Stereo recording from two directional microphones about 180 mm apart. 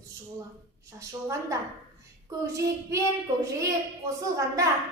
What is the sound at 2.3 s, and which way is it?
A child's voice, 15° right (ahead or behind).